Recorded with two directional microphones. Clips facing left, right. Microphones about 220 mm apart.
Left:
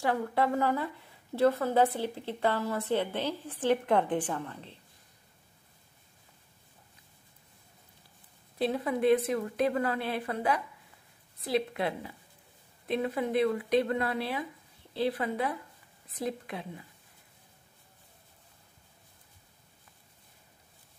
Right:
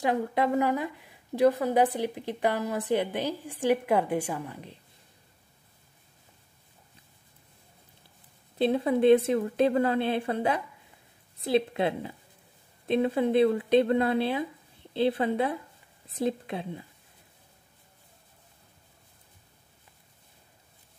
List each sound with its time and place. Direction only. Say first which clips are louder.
0.0 s a woman's voice: right 2 dB; 20° right (ahead or behind)
8.5 s a woman's voice: right 5 dB; 25° right (ahead or behind)